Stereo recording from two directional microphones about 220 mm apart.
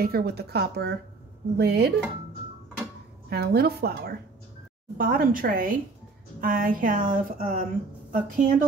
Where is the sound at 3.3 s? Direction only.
45° right (ahead or behind).